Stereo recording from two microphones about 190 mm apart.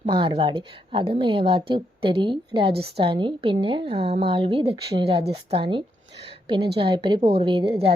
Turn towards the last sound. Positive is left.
turn(degrees=-25)  # may be behind; listen again after turning